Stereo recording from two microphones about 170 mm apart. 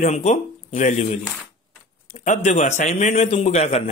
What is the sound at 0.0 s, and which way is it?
Speech, 40° left (ahead or behind).